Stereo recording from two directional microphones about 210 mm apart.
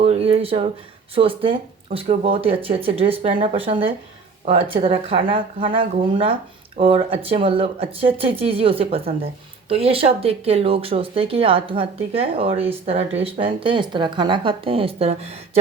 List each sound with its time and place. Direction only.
0.0 s speech: 30° right (ahead or behind)